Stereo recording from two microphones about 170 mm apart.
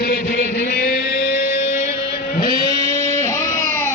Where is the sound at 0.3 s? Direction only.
45° right (ahead or behind).